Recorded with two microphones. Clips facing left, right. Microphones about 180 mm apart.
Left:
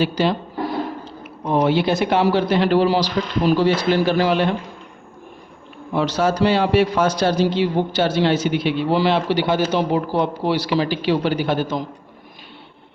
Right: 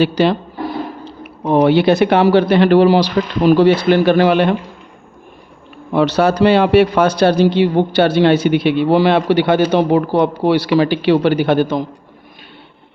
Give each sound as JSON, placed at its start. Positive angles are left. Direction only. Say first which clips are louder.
{"t": 0.0, "sound": "speech", "louder": "right 5 dB", "side_deg": -65}
{"t": 1.6, "sound": "a man's voice", "louder": "right 7 dB", "side_deg": -65}
{"t": 5.9, "sound": "a man's voice", "louder": "right 6 dB", "side_deg": -65}